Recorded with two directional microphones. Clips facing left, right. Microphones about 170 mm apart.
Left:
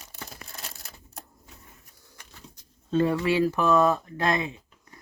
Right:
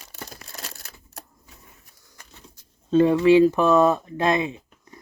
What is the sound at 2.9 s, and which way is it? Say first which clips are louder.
Speech: right 8 dB; 20° right (ahead or behind).